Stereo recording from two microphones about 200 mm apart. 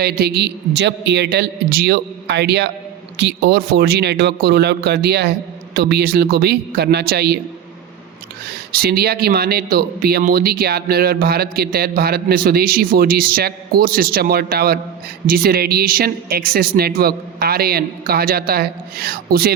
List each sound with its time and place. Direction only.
0.0 s a man's voice: 50° right (ahead or behind)
8.7 s a man's voice: 50° right (ahead or behind)